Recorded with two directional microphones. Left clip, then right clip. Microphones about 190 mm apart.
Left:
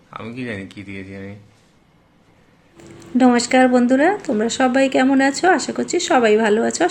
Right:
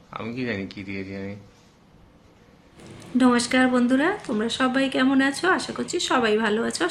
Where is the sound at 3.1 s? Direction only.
5° left (ahead or behind).